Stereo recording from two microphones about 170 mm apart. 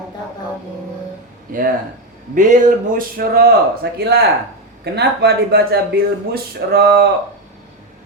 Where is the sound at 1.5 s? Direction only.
55° right (ahead or behind).